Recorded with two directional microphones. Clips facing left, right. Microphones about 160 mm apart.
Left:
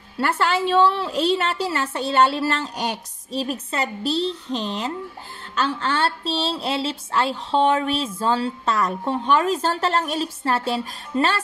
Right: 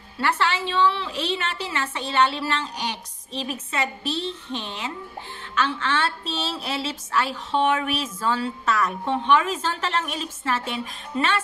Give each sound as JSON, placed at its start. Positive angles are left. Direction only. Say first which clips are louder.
{"t": 0.2, "sound": "a woman's voice", "louder": "left 3 dB", "side_deg": 45}